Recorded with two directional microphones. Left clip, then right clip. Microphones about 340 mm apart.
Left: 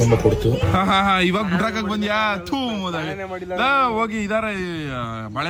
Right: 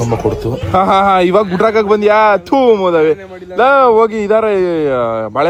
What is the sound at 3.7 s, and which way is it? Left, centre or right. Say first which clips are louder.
Speech: right 12 dB; centre.